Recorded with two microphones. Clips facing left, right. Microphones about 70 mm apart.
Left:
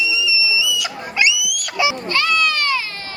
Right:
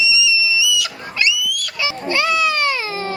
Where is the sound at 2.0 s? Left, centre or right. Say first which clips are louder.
Right 1 dB; centre.